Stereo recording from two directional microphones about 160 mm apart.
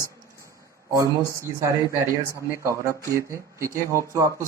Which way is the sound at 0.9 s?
20° right (ahead or behind).